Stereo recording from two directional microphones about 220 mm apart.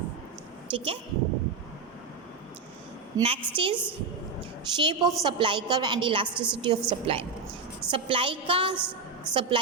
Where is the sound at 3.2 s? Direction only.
25° right (ahead or behind).